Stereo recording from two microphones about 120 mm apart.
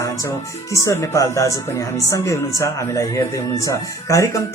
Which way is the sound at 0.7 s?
25° left (ahead or behind).